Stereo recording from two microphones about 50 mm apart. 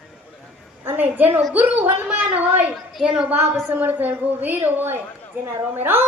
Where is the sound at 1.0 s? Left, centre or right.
Right.